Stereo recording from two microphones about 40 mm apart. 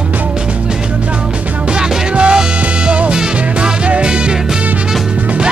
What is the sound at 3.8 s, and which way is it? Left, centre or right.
Music, right.